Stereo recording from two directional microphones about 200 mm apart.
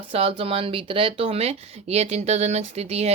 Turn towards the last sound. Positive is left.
turn(degrees=-30)  # may be behind; listen again after turning